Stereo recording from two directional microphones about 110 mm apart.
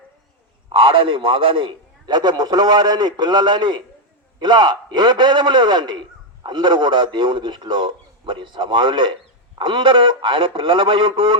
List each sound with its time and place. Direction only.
0.7 s a man's voice: 50° right (ahead or behind)